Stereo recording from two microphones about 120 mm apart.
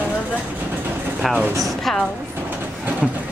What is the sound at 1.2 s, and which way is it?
Speech, centre (ahead or behind).